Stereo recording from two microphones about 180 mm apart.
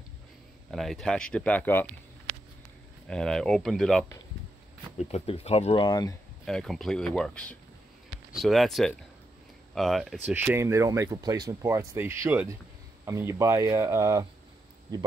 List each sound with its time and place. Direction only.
0.7 s speech: centre (ahead or behind)
3.1 s speech: 5° left (ahead or behind)
4.9 s speech: 35° left (ahead or behind)
5.9 s speech: 20° left (ahead or behind)
6.4 s speech: centre (ahead or behind); by 14.2 s 15° right (ahead or behind)